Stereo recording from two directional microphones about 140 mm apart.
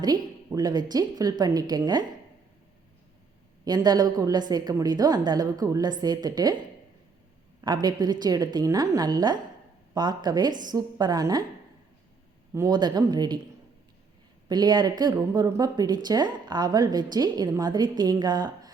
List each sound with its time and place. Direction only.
0.0 s a woman's voice: 30° right (ahead or behind)
3.6 s a woman's voice: 30° right (ahead or behind)
7.6 s a woman's voice: 30° right (ahead or behind)
12.5 s a woman's voice: 30° right (ahead or behind)
14.4 s a woman's voice: 30° right (ahead or behind)